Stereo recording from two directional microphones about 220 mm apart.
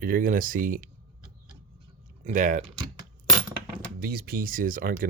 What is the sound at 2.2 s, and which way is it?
Speech, 35° right (ahead or behind).